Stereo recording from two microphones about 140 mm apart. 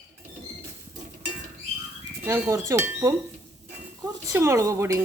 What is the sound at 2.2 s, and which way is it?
Speech, 15° right (ahead or behind).